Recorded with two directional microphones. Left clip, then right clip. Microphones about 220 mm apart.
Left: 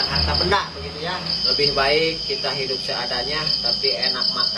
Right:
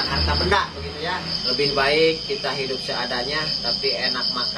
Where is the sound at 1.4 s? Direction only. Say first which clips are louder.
Left 1 dB; centre (ahead or behind).